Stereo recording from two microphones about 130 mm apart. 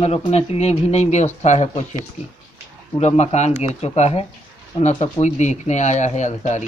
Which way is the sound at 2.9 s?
55° left (ahead or behind).